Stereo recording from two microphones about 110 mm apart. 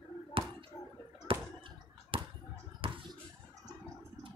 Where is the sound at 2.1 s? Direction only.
50° right (ahead or behind).